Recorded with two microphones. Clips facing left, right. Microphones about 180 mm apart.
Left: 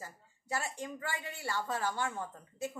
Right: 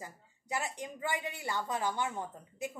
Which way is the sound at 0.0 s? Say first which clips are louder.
Right 1 dB; 15° right (ahead or behind).